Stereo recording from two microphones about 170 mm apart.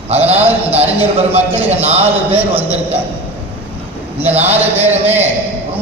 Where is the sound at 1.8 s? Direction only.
35° right (ahead or behind).